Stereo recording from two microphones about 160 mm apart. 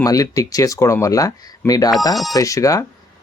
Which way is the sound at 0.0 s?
20° left (ahead or behind).